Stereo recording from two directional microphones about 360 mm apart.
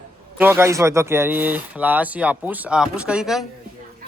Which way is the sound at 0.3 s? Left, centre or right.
Centre.